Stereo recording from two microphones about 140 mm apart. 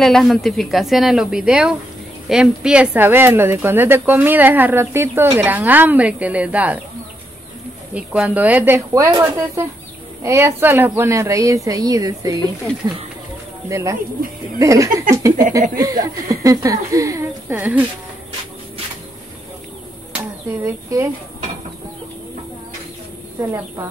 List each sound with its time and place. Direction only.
0.0 s speech: centre (ahead or behind)
7.9 s speech: 10° right (ahead or behind); by 12.4 s 25° right (ahead or behind)
13.7 s speech: 20° right (ahead or behind)
20.6 s speech: 20° right (ahead or behind)